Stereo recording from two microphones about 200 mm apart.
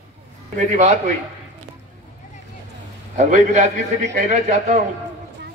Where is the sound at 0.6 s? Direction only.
35° right (ahead or behind).